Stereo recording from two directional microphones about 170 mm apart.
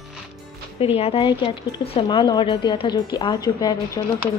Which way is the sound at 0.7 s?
35° left (ahead or behind).